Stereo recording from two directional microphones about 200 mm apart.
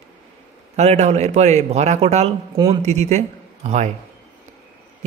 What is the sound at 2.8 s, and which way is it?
A man's voice, 35° right (ahead or behind).